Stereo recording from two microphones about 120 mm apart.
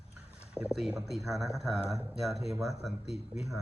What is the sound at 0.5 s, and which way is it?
Speech, 5° right (ahead or behind).